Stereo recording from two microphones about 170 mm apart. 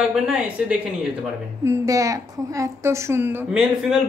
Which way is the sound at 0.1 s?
5° right (ahead or behind).